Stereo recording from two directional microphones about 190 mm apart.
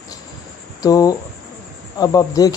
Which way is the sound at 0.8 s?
20° left (ahead or behind).